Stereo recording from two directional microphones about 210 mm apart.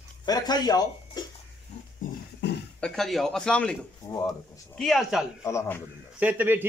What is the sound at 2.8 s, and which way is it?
Speech, centre (ahead or behind).